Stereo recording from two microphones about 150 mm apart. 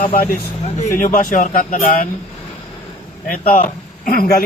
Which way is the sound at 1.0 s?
60° left (ahead or behind).